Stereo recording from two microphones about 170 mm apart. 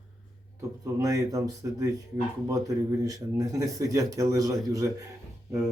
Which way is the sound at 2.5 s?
20° right (ahead or behind).